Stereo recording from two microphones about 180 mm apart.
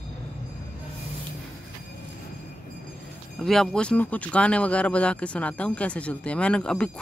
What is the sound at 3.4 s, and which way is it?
Speech, 5° left (ahead or behind).